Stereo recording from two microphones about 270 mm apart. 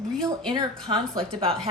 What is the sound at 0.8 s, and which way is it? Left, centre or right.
Speech, right.